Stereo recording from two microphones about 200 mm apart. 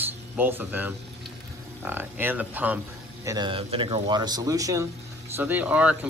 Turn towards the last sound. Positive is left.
turn(degrees=-5)  # may be behind; listen again after turning